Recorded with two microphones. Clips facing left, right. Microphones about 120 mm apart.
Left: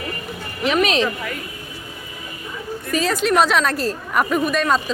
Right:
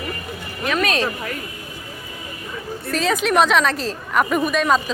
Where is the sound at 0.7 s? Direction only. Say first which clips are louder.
Left 3 dB; 20° left (ahead or behind).